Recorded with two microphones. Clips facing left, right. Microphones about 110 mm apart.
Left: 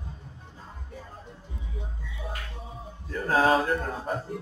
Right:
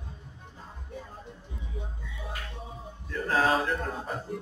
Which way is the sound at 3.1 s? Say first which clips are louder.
Left 3 dB; 45° left (ahead or behind).